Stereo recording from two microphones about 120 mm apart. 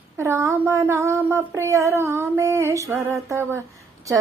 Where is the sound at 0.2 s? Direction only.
20° right (ahead or behind).